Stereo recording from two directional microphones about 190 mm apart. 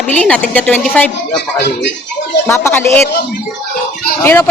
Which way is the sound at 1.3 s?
65° left (ahead or behind).